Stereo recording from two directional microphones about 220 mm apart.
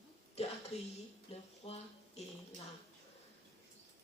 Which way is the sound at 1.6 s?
30° left (ahead or behind).